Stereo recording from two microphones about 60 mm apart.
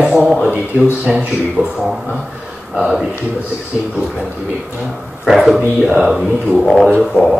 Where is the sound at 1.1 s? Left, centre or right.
Centre.